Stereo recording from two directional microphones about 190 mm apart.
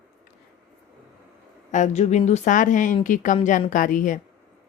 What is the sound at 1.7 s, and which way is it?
A woman's voice, 35° left (ahead or behind).